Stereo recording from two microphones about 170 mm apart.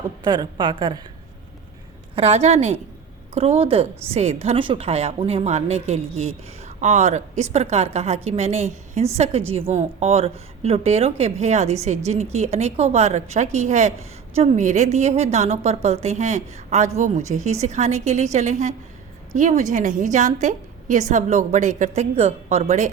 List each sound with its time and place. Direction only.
0.3 s a woman's voice: 25° right (ahead or behind)
2.1 s a woman's voice: 35° right (ahead or behind)